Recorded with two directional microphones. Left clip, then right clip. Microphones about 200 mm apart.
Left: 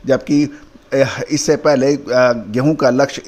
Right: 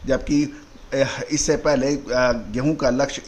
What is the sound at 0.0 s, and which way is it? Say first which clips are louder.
Speech: left 6 dB; 30° left (ahead or behind).